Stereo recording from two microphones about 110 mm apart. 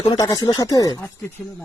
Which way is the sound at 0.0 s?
35° left (ahead or behind).